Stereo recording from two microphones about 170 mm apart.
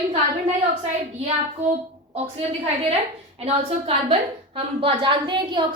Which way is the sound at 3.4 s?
35° right (ahead or behind).